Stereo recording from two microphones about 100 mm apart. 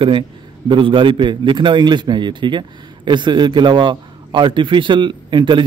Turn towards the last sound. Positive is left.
turn(degrees=-50)  # may be behind; listen again after turning